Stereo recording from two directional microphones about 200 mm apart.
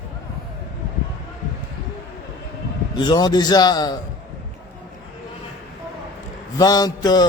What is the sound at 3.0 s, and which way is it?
A man's voice, 20° left (ahead or behind).